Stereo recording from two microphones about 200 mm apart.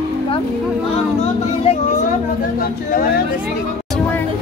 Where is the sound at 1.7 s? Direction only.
30° left (ahead or behind).